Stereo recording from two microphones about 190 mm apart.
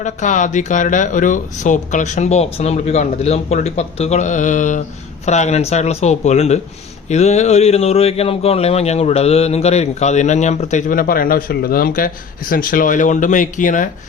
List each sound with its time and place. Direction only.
0.0 s speech: 40° left (ahead or behind)